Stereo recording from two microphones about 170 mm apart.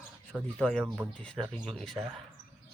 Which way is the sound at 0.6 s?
5° left (ahead or behind).